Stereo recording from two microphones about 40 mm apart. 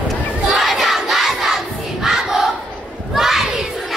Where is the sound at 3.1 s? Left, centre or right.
Centre.